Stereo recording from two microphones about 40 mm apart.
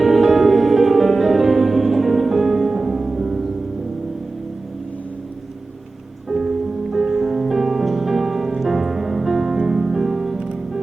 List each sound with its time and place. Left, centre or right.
0.0 s music: centre
6.2 s music: centre
10.3 s music: centre